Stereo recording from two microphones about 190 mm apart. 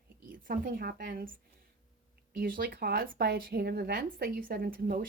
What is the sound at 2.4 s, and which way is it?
Speech, 50° right (ahead or behind).